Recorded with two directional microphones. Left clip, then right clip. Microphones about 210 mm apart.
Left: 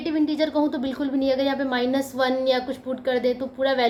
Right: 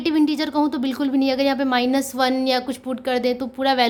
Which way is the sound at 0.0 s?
45° right (ahead or behind).